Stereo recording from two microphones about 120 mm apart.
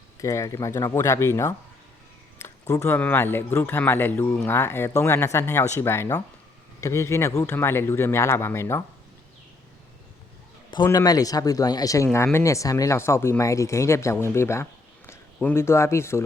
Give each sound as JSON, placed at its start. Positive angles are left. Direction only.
{"t": 0.2, "sound": "speech", "side_deg": 25}
{"t": 10.9, "sound": "speech", "side_deg": 30}
{"t": 14.3, "sound": "a sound", "side_deg": 20}
{"t": 15.4, "sound": "speech", "side_deg": 20}